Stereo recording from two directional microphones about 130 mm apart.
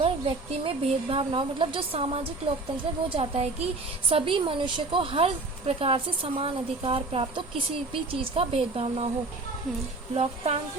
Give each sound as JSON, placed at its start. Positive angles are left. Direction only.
{"t": 0.0, "sound": "a woman's voice", "side_deg": -45}
{"t": 10.2, "sound": "a woman's voice", "side_deg": -50}